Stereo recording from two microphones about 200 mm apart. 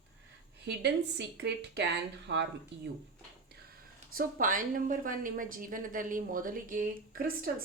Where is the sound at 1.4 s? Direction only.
60° right (ahead or behind).